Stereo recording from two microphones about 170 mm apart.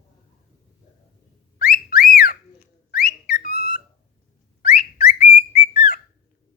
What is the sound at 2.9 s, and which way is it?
Whistle, 65° left (ahead or behind).